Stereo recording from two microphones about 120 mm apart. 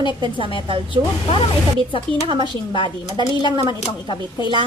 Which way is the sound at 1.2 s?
45° left (ahead or behind).